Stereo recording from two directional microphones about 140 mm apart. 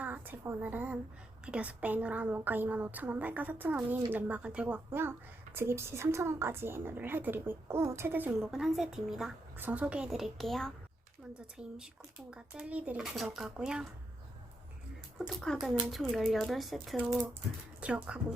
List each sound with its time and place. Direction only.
0.0 s a woman's voice: 15° right (ahead or behind)
12.3 s speech: 10° right (ahead or behind)
15.3 s a woman's voice: 5° left (ahead or behind)